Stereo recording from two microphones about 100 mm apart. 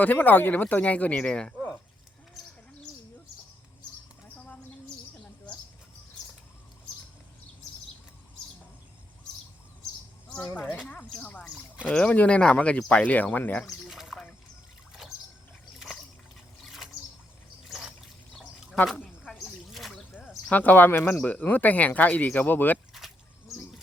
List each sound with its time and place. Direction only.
0.0 s speech: 15° left (ahead or behind)
2.4 s bird: centre (ahead or behind)
4.4 s bird: 15° left (ahead or behind)
10.3 s speech: 15° left (ahead or behind)
13.8 s a sound: 5° right (ahead or behind)
17.7 s trickle: 5° right (ahead or behind)
19.0 s snake: 5° left (ahead or behind)
20.1 s speech: 15° left (ahead or behind)
23.0 s a sound: centre (ahead or behind)